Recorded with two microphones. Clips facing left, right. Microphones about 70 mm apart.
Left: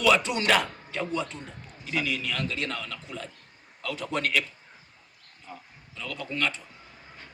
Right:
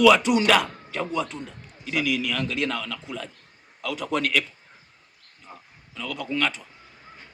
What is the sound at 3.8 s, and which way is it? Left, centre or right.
Speech, right.